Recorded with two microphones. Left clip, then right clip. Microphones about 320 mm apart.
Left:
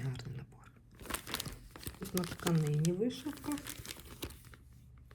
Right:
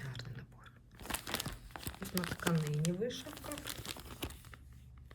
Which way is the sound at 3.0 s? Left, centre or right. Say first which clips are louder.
Left 2 dB; centre.